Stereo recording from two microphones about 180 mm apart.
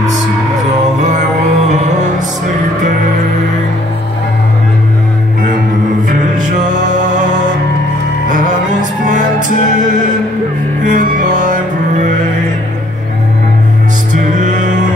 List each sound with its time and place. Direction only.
6.0 s music: 45° right (ahead or behind)
8.3 s music: 45° right (ahead or behind)
10.8 s music: 50° right (ahead or behind)
14.1 s music: 45° right (ahead or behind)